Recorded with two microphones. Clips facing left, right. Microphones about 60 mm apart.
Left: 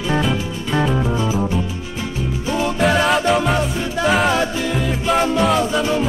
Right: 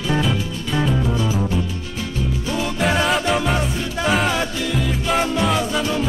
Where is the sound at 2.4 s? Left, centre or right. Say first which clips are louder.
Left 6 dB; centre.